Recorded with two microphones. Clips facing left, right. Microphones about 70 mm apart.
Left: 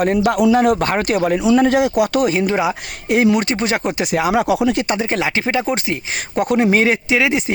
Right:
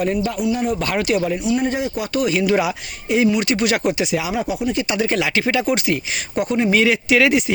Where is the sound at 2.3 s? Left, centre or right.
Left.